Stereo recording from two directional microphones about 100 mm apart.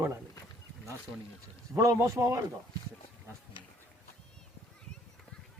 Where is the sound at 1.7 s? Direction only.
30° right (ahead or behind).